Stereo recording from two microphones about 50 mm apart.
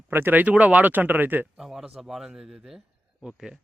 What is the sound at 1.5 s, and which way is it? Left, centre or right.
Speech, centre.